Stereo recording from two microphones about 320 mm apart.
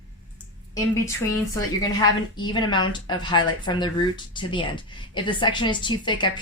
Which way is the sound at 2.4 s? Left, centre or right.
Centre.